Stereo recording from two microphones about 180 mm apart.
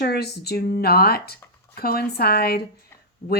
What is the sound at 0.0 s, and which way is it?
A woman's voice, 60° left (ahead or behind).